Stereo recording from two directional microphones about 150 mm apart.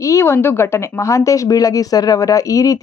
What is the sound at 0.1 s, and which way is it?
A woman's voice, 20° left (ahead or behind).